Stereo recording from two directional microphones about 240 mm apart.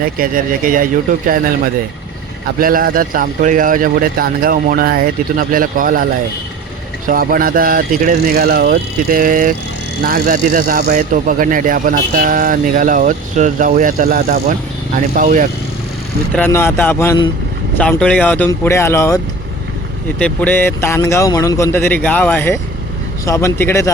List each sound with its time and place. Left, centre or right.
0.0 s speech: right
2.6 s speech: right
7.1 s speech: right
16.3 s a man's voice: centre